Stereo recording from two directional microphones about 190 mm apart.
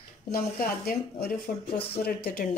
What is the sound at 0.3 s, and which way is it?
Speech, 50° left (ahead or behind).